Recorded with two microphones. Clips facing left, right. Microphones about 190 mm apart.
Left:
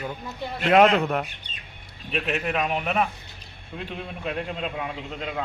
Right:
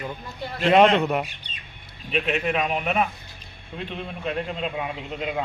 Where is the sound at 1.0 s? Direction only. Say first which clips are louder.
Right 1 dB; 5° right (ahead or behind).